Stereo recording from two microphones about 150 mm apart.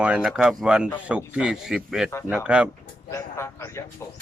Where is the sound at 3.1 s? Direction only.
20° left (ahead or behind).